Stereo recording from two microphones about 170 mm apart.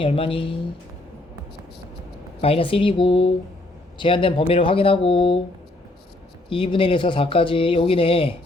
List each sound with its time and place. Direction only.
0.0 s speech: 30° left (ahead or behind)
2.4 s speech: 35° left (ahead or behind)
6.5 s speech: 30° left (ahead or behind)